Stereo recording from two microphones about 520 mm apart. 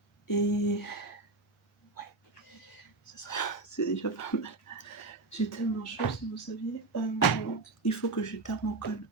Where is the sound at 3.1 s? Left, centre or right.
Left.